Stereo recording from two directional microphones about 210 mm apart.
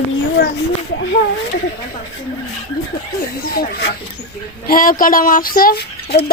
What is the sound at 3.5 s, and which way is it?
Speech, 50° left (ahead or behind).